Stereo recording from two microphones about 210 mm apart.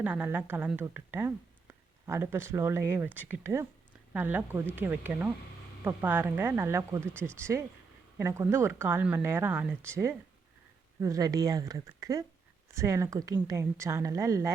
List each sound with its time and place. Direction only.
0.0 s a woman's voice: 5° right (ahead or behind)
7.0 s speech: 5° left (ahead or behind)
8.2 s a woman's voice: 15° right (ahead or behind)
11.0 s a woman's voice: 15° right (ahead or behind)